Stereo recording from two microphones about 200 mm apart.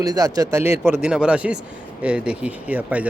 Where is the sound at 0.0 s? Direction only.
20° right (ahead or behind).